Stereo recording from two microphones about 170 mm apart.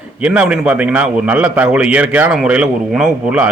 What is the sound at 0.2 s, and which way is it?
A man's voice, 5° right (ahead or behind).